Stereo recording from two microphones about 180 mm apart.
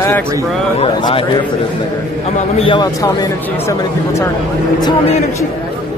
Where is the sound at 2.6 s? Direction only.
30° left (ahead or behind).